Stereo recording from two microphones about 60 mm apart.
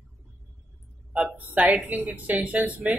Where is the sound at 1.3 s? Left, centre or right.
Right.